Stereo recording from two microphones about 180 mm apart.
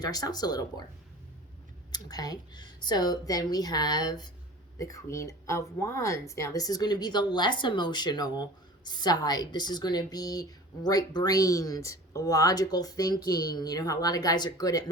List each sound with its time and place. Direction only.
0.0 s speech: 20° left (ahead or behind)
1.9 s speech: 20° left (ahead or behind)